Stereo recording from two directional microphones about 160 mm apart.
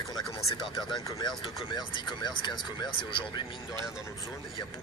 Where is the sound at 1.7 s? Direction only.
30° left (ahead or behind).